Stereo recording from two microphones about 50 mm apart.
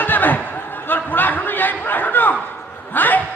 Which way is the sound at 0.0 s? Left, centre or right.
Left.